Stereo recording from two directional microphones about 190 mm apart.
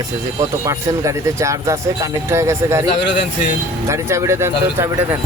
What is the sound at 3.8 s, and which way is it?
Speech, 15° right (ahead or behind).